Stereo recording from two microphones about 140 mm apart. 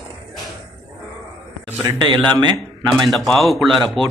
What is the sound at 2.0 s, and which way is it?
Speech, 30° right (ahead or behind).